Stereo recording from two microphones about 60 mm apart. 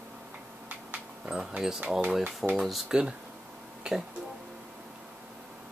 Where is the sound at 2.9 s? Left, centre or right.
Centre.